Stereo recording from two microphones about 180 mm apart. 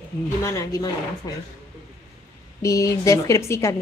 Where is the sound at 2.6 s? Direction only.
15° left (ahead or behind).